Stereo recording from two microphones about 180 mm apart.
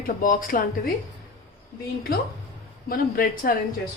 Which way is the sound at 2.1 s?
55° left (ahead or behind).